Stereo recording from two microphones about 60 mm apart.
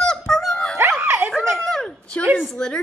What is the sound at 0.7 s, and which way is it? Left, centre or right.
Dog, right.